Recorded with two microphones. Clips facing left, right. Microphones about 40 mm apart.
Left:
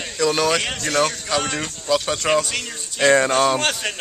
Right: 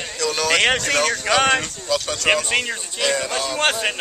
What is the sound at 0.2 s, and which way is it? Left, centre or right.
Speech, centre.